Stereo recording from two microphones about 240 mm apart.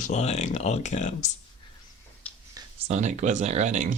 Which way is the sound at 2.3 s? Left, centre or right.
Centre.